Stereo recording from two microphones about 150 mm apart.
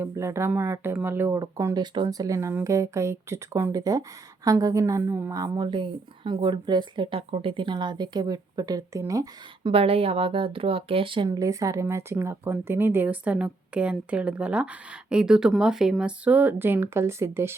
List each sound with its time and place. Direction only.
0.0 s a woman's voice: 20° right (ahead or behind)
9.6 s speech: 40° right (ahead or behind)
11.3 s a woman's voice: 20° right (ahead or behind)